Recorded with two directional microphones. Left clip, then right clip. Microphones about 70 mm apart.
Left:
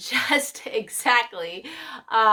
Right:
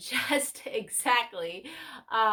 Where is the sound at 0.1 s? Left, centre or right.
Left.